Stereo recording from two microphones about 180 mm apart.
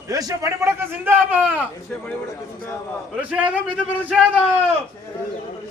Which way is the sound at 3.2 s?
5° right (ahead or behind).